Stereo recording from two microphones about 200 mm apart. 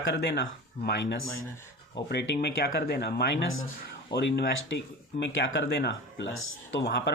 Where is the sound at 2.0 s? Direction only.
55° left (ahead or behind).